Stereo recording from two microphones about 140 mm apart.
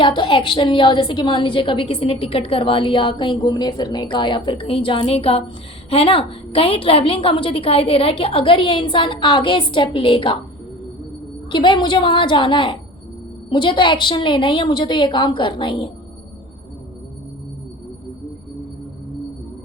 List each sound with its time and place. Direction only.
0.0 s a woman's voice: 40° left (ahead or behind)
11.5 s a woman's voice: 35° left (ahead or behind)